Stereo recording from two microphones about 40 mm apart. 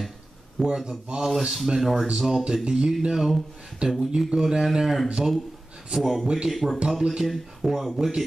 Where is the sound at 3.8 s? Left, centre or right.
Right.